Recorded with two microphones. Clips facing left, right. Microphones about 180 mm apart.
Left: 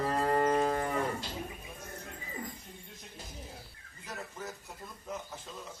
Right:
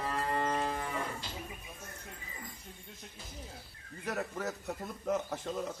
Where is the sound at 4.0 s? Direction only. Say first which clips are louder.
Right 6 dB; 65° right (ahead or behind).